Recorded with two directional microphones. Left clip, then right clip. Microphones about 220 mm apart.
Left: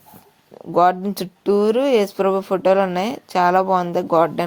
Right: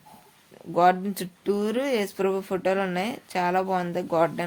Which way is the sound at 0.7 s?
25° left (ahead or behind).